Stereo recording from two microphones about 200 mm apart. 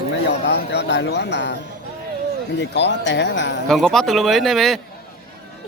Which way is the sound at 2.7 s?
60° left (ahead or behind).